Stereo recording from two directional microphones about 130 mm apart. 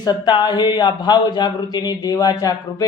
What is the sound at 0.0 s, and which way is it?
Speech, 30° left (ahead or behind).